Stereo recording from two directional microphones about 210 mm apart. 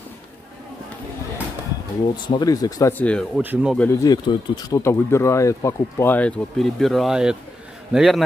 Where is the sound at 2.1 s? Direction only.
20° left (ahead or behind).